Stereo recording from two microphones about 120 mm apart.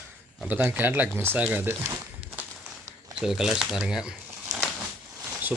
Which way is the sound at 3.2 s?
5° right (ahead or behind).